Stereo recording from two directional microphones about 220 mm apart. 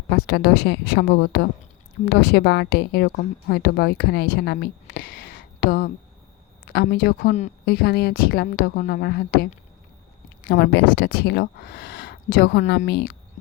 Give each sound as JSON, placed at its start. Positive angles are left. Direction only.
{"t": 0.1, "sound": "speech", "side_deg": 45}